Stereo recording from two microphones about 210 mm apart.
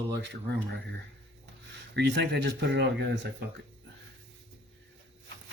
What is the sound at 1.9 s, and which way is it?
Speech, 55° right (ahead or behind).